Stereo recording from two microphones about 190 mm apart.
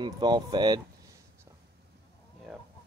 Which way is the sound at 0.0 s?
20° right (ahead or behind).